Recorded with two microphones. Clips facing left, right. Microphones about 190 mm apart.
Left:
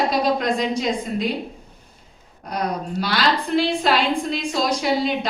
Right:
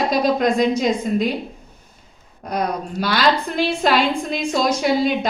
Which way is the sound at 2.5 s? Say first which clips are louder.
Right 2 dB; 45° right (ahead or behind).